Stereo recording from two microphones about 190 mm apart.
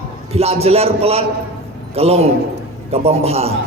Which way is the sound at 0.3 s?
30° right (ahead or behind).